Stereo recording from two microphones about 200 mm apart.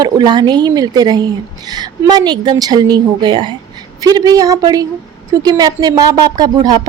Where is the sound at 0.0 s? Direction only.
20° right (ahead or behind).